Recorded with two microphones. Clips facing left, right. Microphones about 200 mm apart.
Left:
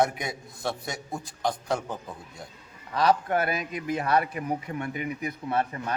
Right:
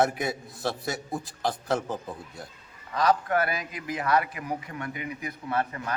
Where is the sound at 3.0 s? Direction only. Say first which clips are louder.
Left 1 dB; 25° left (ahead or behind).